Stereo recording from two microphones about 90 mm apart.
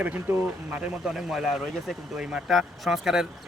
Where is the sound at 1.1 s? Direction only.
5° right (ahead or behind).